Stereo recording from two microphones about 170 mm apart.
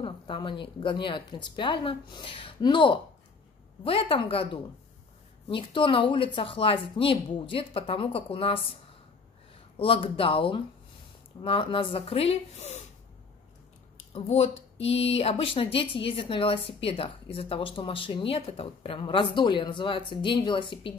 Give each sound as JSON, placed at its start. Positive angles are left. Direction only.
{"t": 0.0, "sound": "speech", "side_deg": 30}
{"t": 9.8, "sound": "speech", "side_deg": 30}
{"t": 14.1, "sound": "speech", "side_deg": 35}